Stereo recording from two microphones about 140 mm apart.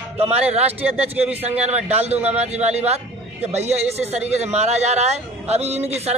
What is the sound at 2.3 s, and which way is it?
A man's voice, 50° right (ahead or behind).